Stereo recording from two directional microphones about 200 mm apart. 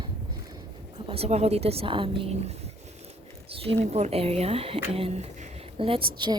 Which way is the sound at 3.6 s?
30° right (ahead or behind).